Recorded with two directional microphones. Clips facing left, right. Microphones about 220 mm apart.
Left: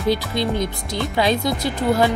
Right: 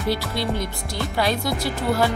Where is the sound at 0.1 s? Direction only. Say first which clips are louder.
Left 3 dB; 20° left (ahead or behind).